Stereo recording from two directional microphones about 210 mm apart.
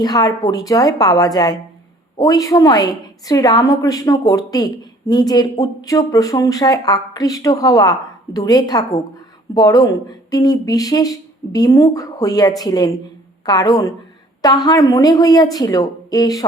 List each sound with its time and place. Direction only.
0.0 s a woman's voice: 20° left (ahead or behind)